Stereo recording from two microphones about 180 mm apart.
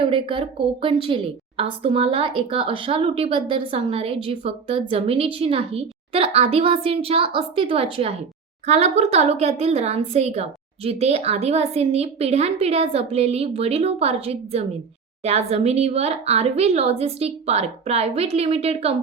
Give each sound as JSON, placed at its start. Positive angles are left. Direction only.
{"t": 0.0, "sound": "a woman's voice", "side_deg": -30}